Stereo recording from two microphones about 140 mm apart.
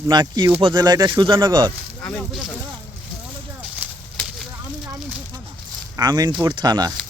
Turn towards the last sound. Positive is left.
turn(degrees=-30)  # may be behind; listen again after turning